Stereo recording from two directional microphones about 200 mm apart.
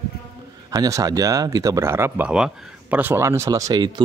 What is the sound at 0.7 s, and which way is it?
Speech, 15° right (ahead or behind).